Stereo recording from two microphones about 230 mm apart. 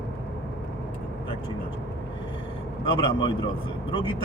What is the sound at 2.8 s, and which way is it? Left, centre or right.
Speech, left.